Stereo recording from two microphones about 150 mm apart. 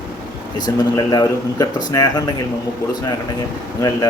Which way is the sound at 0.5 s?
25° left (ahead or behind).